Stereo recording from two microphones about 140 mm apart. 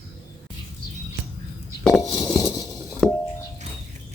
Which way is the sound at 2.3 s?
25° left (ahead or behind).